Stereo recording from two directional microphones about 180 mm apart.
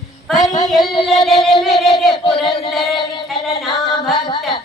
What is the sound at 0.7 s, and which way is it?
Music, 25° left (ahead or behind).